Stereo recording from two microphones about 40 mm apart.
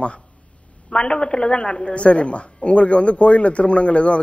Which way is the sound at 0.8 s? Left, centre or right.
Left.